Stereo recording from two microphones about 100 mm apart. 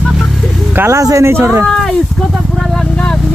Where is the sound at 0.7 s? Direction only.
25° right (ahead or behind).